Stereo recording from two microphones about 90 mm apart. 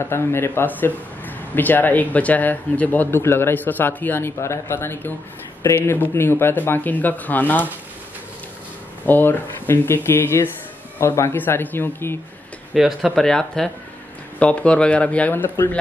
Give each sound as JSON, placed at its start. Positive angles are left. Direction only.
{"t": 0.1, "sound": "a man's voice", "side_deg": 25}
{"t": 9.0, "sound": "a man's voice", "side_deg": 20}
{"t": 12.7, "sound": "speech", "side_deg": -5}
{"t": 13.2, "sound": "a man's voice", "side_deg": 5}